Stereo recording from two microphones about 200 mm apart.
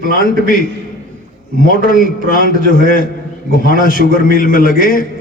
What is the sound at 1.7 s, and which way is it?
A man's voice, 45° left (ahead or behind).